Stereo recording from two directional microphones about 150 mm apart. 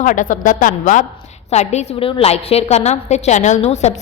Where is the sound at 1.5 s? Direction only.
50° left (ahead or behind).